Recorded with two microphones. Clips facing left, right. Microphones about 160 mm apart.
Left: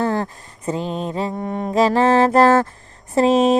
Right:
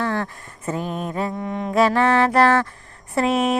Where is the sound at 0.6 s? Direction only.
20° left (ahead or behind).